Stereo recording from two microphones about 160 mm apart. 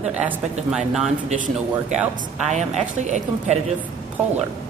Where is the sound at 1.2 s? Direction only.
45° right (ahead or behind).